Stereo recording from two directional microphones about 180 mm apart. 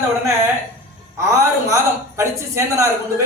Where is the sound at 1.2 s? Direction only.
15° right (ahead or behind).